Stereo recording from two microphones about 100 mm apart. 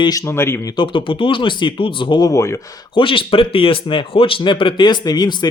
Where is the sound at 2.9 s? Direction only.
60° left (ahead or behind).